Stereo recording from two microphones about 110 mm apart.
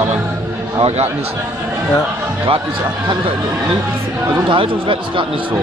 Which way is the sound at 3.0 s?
45° right (ahead or behind).